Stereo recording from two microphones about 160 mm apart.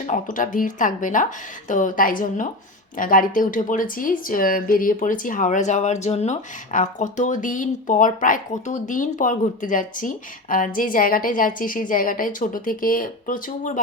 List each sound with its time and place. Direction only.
0.0 s speech: 50° left (ahead or behind)